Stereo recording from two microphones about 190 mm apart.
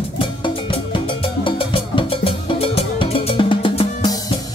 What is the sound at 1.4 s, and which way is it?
Music, 25° left (ahead or behind).